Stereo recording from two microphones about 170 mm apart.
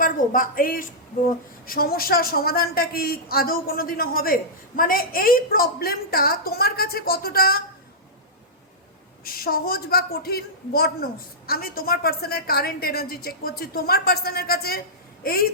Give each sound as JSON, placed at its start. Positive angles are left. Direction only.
{"t": 0.0, "sound": "a woman's voice", "side_deg": 55}
{"t": 9.2, "sound": "a woman's voice", "side_deg": 60}